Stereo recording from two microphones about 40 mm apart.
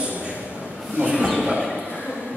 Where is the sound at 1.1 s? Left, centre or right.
Right.